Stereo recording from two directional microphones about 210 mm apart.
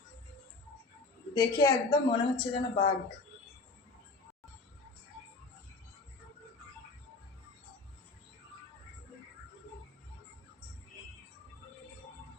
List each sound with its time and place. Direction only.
1.3 s a woman's voice: 20° left (ahead or behind)